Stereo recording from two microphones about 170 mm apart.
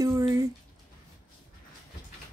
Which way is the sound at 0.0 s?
20° right (ahead or behind).